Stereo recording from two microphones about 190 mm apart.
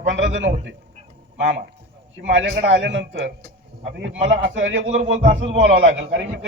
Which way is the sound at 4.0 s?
75° right (ahead or behind).